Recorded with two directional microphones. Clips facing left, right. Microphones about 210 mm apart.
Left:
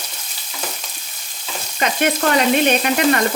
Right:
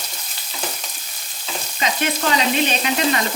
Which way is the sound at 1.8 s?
55° left (ahead or behind).